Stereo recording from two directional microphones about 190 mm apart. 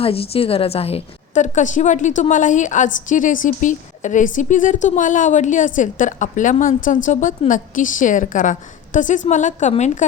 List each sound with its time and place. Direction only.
0.0 s a woman's voice: 30° left (ahead or behind)